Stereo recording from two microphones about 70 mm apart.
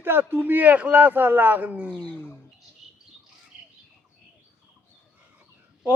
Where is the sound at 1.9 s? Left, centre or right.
Left.